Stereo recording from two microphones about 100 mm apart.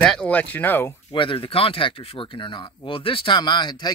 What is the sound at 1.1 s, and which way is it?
Speech, 60° left (ahead or behind).